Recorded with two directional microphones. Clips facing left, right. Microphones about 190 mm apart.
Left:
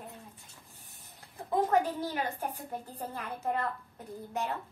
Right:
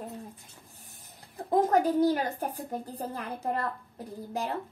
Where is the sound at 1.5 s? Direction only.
40° right (ahead or behind).